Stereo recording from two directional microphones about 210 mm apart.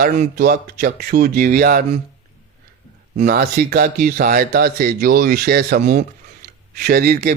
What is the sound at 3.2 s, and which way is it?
Speech, 45° right (ahead or behind).